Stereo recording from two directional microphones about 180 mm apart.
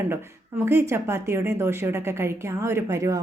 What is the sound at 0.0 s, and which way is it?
A woman's voice, 15° right (ahead or behind).